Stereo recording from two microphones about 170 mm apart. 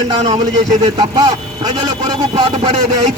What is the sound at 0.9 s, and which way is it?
A man's voice, 25° right (ahead or behind).